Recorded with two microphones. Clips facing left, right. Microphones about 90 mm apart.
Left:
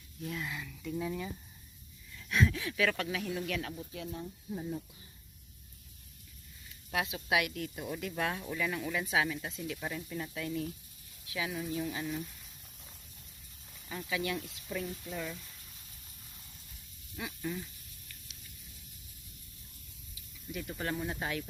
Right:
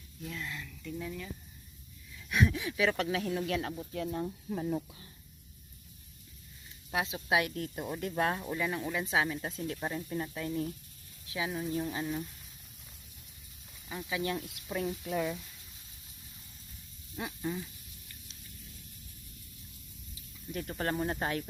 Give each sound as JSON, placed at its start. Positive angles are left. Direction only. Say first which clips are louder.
{"t": 0.2, "sound": "speech", "louder": "left 2 dB", "side_deg": 5}
{"t": 2.1, "sound": "speech", "louder": "right 1 dB", "side_deg": -15}
{"t": 3.9, "sound": "speech", "louder": "right 6 dB", "side_deg": -50}
{"t": 4.5, "sound": "speech", "louder": "right 5 dB", "side_deg": -65}
{"t": 6.9, "sound": "speech", "louder": "right 1 dB", "side_deg": -25}
{"t": 8.4, "sound": "speech", "louder": "right 1 dB", "side_deg": -25}
{"t": 13.8, "sound": "speech", "louder": "right 1 dB", "side_deg": -10}
{"t": 14.1, "sound": "speech", "louder": "right 1 dB", "side_deg": -30}
{"t": 15.0, "sound": "speech", "louder": "right 7 dB", "side_deg": -60}
{"t": 17.2, "sound": "speech", "louder": "right 2 dB", "side_deg": -25}
{"t": 20.5, "sound": "speech", "louder": "right 3 dB", "side_deg": -40}